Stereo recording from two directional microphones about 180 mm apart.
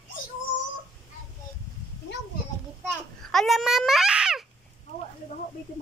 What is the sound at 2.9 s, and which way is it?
A child's voice, centre (ahead or behind).